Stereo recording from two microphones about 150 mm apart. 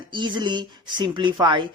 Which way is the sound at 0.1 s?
30° right (ahead or behind).